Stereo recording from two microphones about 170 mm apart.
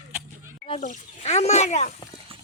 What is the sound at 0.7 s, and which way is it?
Speech, 40° left (ahead or behind).